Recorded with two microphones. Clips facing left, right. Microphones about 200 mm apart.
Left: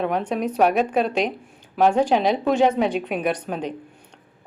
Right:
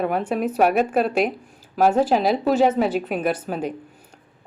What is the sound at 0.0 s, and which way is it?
A woman's voice, 5° right (ahead or behind).